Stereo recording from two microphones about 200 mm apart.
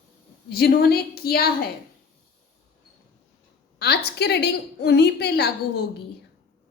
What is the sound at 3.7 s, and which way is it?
A woman's voice, 55° left (ahead or behind).